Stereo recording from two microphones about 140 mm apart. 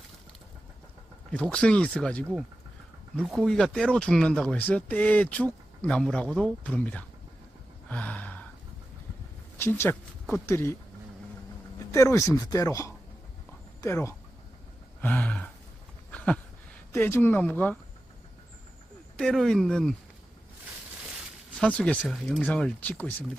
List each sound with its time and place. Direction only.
1.3 s speech: 10° left (ahead or behind)
3.3 s speech: 5° left (ahead or behind)
7.9 s gasp: 10° left (ahead or behind)
9.6 s speech: 15° left (ahead or behind)
11.9 s speech: 20° left (ahead or behind)
16.1 s a sound: 10° left (ahead or behind)
16.9 s speech: 15° left (ahead or behind)
19.1 s speech: 5° left (ahead or behind)
21.5 s speech: 5° left (ahead or behind)